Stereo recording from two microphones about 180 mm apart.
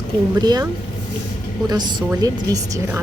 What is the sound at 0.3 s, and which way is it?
Speech, 20° right (ahead or behind).